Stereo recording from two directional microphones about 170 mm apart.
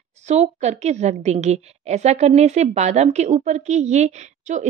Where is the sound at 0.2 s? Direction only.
40° right (ahead or behind).